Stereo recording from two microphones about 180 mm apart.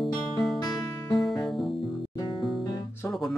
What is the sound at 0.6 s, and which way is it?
Music, 20° left (ahead or behind).